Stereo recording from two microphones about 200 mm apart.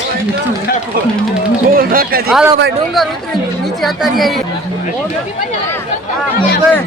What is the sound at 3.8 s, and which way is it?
Speech, centre (ahead or behind).